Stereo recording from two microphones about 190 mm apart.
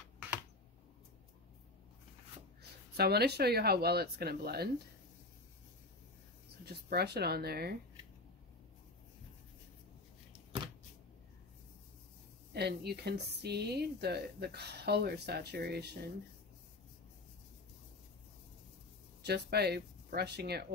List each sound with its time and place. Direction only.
3.0 s speech: 55° right (ahead or behind)
6.6 s speech: 55° right (ahead or behind)
12.5 s speech: 60° right (ahead or behind)
19.2 s speech: 60° right (ahead or behind)